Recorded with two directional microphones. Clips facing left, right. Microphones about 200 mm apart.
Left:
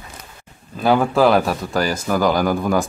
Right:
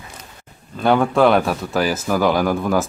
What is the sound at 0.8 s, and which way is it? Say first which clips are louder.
Speech: even; centre (ahead or behind).